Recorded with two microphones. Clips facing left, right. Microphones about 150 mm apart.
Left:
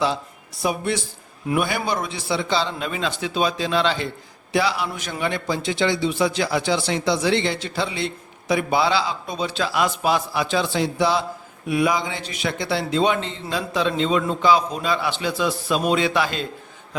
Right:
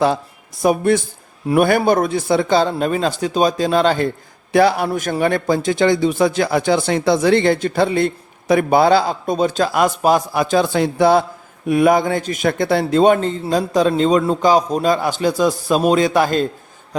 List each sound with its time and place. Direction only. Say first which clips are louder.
0.6 s speech: right 8 dB; 50° right (ahead or behind)